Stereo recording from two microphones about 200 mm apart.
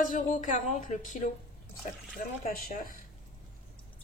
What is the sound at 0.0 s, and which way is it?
Speech, 40° left (ahead or behind).